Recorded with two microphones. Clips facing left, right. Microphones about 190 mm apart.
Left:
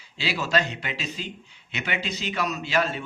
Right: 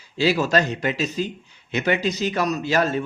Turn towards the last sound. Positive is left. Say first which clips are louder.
# right 5 dB
turn(degrees=-40)  # may be behind; listen again after turning